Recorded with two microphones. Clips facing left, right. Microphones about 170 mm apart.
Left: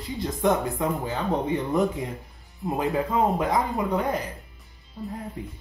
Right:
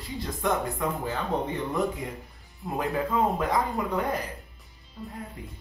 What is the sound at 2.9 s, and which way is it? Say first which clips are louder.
Speech: left 2 dB; 20° left (ahead or behind).